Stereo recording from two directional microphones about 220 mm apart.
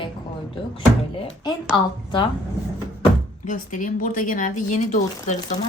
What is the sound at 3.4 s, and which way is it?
Speech, 35° left (ahead or behind).